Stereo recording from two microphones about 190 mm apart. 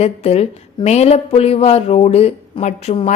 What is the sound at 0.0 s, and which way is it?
A woman's voice, 35° left (ahead or behind).